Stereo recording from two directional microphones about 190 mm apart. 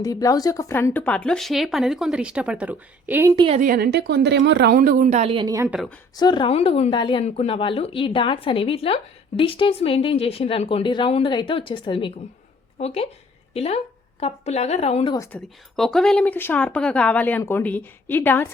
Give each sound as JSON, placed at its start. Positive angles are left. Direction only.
{"t": 0.0, "sound": "a woman's voice", "side_deg": 20}
{"t": 3.3, "sound": "a woman's voice", "side_deg": -30}
{"t": 3.6, "sound": "a woman's voice", "side_deg": -50}
{"t": 5.3, "sound": "a woman's voice", "side_deg": -20}
{"t": 5.6, "sound": "a woman's voice", "side_deg": -5}
{"t": 6.1, "sound": "a woman's voice", "side_deg": 25}
{"t": 15.1, "sound": "speech", "side_deg": 15}
{"t": 15.7, "sound": "speech", "side_deg": 0}